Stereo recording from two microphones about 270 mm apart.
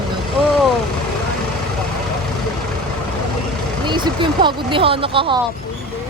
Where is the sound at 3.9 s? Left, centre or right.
Centre.